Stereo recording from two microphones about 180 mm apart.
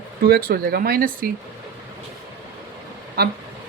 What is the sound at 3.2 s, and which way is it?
Speech, 60° right (ahead or behind).